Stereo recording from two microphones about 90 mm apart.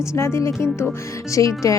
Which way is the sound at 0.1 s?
30° left (ahead or behind).